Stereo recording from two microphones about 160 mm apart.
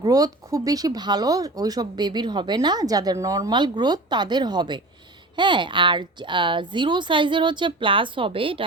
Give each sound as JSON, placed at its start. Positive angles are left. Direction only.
{"t": 0.0, "sound": "a woman's voice", "side_deg": -25}